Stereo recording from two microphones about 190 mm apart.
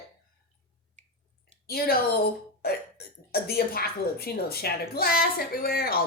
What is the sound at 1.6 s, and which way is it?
Speech, 55° left (ahead or behind).